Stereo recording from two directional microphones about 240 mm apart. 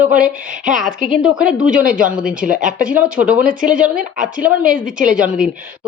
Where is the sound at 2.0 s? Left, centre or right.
Centre.